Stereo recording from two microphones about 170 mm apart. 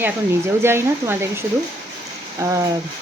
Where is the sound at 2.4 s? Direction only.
15° right (ahead or behind).